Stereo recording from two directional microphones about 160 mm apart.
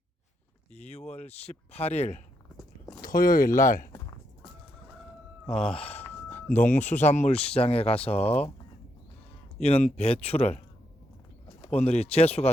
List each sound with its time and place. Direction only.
0.7 s speech: 40° left (ahead or behind)
3.0 s speech: 65° left (ahead or behind)
5.5 s speech: 5° left (ahead or behind)
5.7 s speech: 40° left (ahead or behind)
6.5 s speech: 50° left (ahead or behind)
9.6 s speech: 40° left (ahead or behind)
11.7 s speech: 40° left (ahead or behind)